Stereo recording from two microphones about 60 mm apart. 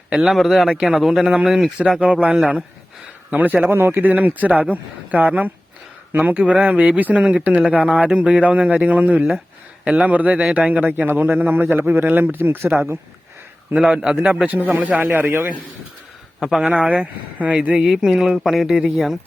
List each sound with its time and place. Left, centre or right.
0.1 s speech: centre
1.2 s speech: right
1.5 s speech: centre
1.8 s speech: right
3.2 s a man's voice: right
3.6 s a man's voice: right
13.7 s speech: centre
15.0 s a man's voice: right
16.6 s speech: centre
17.8 s speech: centre